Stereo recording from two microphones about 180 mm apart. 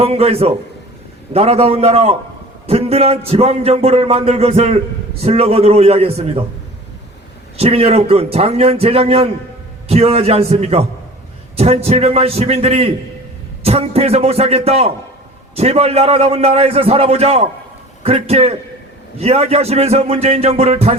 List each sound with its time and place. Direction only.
0.0 s a man's voice: 35° right (ahead or behind)
7.5 s a man's voice: 35° right (ahead or behind)